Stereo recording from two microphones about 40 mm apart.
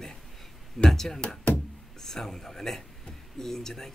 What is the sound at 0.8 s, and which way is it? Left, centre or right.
Speech, centre.